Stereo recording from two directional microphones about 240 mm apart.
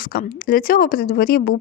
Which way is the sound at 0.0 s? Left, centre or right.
Left.